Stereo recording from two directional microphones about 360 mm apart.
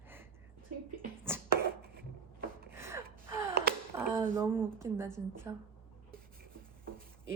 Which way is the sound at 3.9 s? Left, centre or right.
Centre.